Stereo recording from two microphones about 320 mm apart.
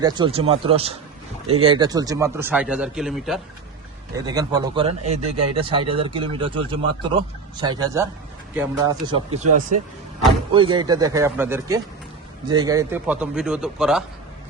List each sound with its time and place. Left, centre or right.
0.0 s a man's voice: centre
4.1 s a man's voice: centre
10.5 s a man's voice: centre